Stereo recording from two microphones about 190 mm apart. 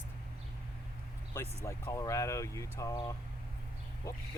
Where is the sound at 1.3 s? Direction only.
15° left (ahead or behind).